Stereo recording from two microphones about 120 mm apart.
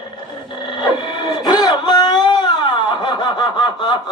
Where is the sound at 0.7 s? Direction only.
40° left (ahead or behind).